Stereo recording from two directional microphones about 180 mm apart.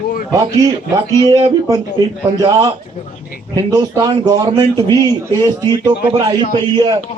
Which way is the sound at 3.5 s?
25° right (ahead or behind).